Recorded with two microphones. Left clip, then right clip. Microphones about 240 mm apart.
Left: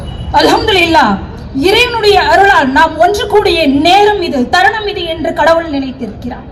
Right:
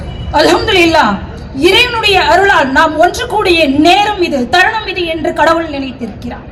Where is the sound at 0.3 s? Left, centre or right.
Right.